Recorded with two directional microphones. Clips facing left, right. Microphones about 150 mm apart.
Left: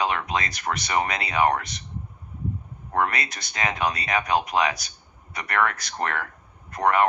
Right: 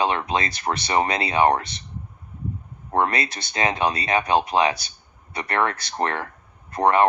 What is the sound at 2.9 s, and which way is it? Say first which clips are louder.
Speech: right 3 dB; 30° right (ahead or behind).